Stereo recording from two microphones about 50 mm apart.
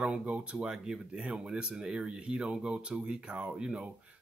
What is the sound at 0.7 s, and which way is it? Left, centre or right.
Speech, centre.